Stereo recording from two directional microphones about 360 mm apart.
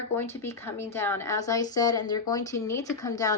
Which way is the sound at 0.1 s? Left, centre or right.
Centre.